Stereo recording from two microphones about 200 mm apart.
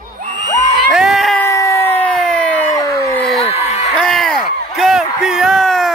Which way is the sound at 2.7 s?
15° left (ahead or behind).